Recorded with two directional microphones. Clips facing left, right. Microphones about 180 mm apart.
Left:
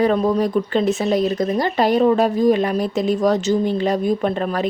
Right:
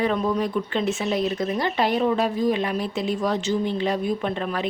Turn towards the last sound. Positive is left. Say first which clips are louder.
# left 5 dB
turn(degrees=40)  # may be behind; listen again after turning